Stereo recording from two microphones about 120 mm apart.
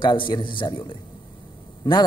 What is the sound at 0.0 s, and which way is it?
A man's voice, 40° left (ahead or behind).